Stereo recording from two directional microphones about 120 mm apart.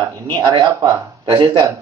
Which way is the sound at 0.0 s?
30° right (ahead or behind).